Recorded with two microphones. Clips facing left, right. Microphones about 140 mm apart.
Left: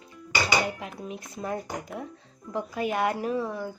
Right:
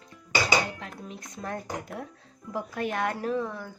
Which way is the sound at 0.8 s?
10° left (ahead or behind).